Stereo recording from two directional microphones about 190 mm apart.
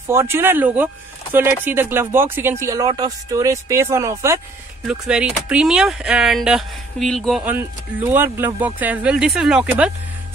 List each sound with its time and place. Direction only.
0.1 s speech: 15° right (ahead or behind)
4.8 s speech: 5° right (ahead or behind)